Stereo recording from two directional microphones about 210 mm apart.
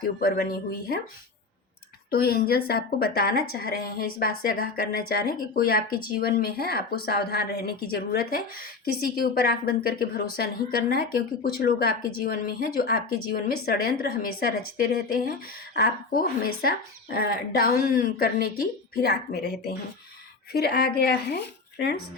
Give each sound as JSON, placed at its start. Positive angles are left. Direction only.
{"t": 0.0, "sound": "speech", "side_deg": 45}
{"t": 2.0, "sound": "speech", "side_deg": 45}